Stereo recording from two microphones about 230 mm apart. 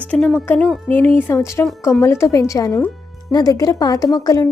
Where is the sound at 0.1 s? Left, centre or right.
Centre.